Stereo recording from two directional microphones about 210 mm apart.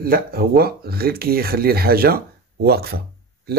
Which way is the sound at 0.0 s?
45° right (ahead or behind).